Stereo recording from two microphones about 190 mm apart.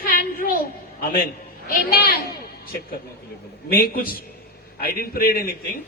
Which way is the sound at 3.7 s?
50° left (ahead or behind).